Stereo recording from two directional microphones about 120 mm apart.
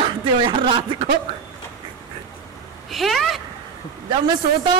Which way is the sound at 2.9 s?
Centre (ahead or behind).